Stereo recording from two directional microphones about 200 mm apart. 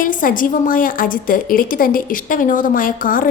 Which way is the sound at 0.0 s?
45° left (ahead or behind).